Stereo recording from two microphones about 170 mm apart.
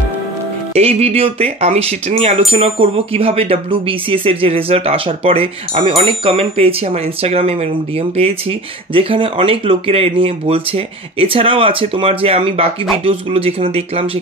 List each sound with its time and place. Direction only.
0.7 s speech: 35° right (ahead or behind)